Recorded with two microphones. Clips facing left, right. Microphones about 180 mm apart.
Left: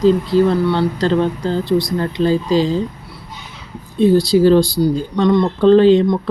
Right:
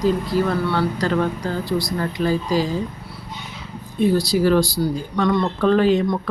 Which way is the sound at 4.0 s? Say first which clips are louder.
Left 6 dB; 25° left (ahead or behind).